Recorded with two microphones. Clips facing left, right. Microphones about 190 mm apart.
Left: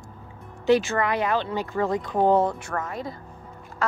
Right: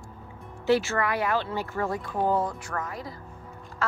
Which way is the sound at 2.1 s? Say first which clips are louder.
Left 6 dB; 70° left (ahead or behind).